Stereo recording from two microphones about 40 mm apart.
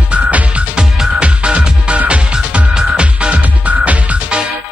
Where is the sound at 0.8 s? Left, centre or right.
Right.